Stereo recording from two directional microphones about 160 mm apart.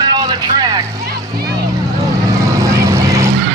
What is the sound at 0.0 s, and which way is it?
Vehicle, 25° right (ahead or behind).